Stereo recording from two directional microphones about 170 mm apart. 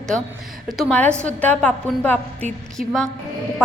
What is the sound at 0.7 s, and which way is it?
A woman's voice, 5° left (ahead or behind).